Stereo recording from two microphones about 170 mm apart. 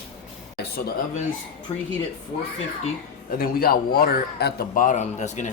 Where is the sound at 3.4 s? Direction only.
60° left (ahead or behind); by 5.5 s 45° left (ahead or behind).